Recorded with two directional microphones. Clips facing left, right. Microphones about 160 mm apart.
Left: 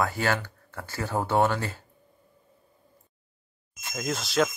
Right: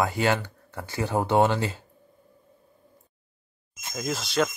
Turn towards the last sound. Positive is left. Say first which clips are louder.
# even
turn(degrees=0)  # may be behind; listen again after turning